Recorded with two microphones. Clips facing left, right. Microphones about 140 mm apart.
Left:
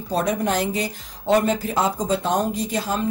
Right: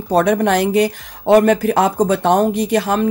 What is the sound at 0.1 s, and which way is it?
Speech, 70° right (ahead or behind).